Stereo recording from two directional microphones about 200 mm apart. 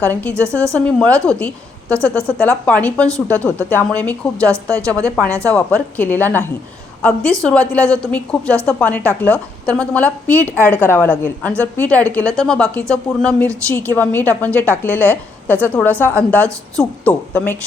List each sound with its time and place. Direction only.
0.0 s a woman's voice: 10° left (ahead or behind)
4.5 s a woman's voice: 15° right (ahead or behind)
5.5 s a woman's voice: 5° left (ahead or behind)